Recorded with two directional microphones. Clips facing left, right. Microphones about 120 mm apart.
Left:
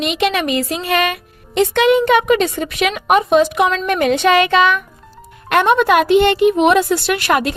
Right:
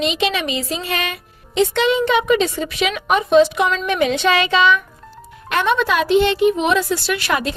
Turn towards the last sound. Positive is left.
turn(degrees=60)  # may be behind; listen again after turning